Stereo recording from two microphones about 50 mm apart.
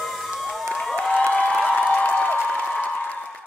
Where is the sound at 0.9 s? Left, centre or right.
Left.